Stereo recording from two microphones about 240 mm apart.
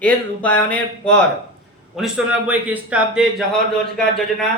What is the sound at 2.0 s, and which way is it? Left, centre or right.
Speech, centre.